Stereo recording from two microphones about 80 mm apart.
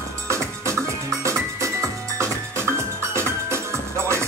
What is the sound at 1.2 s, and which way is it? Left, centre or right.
Music, right.